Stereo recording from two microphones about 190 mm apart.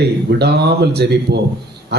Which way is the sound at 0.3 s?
60° right (ahead or behind).